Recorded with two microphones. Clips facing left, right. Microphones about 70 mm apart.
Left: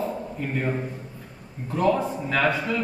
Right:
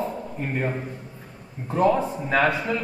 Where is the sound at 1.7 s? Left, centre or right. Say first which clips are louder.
Right 2 dB; right.